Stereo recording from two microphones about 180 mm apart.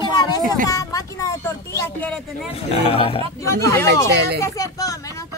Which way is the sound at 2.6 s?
35° left (ahead or behind).